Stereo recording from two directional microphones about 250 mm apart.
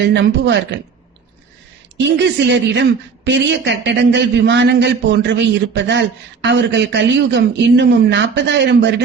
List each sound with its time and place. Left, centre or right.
0.1 s a man's voice: right
2.0 s a man's voice: right